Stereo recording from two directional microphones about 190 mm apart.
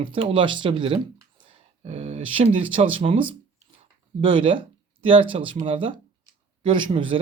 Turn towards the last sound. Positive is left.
turn(degrees=-25)  # may be behind; listen again after turning